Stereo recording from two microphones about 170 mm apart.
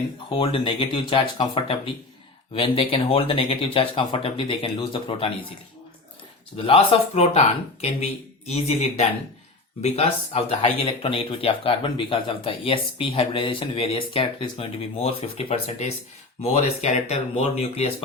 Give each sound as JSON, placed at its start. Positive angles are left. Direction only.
{"t": 0.3, "sound": "speech", "side_deg": 30}
{"t": 6.6, "sound": "speech", "side_deg": 35}